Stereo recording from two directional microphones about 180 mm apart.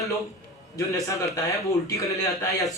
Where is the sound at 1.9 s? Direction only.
15° left (ahead or behind).